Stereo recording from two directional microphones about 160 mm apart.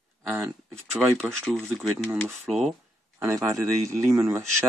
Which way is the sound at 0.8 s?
5° right (ahead or behind).